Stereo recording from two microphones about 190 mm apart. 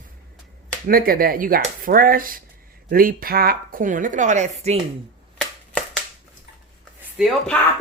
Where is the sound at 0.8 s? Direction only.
50° right (ahead or behind).